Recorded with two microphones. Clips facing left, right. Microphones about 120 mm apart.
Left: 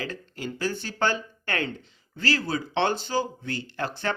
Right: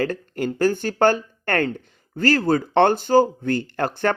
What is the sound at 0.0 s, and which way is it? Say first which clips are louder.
Speech: right 10 dB; 50° right (ahead or behind).